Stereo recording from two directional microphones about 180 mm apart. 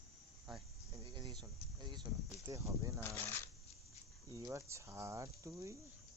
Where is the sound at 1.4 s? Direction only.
25° right (ahead or behind).